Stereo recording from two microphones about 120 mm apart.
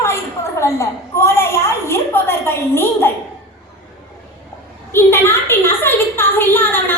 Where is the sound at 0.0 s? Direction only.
25° left (ahead or behind).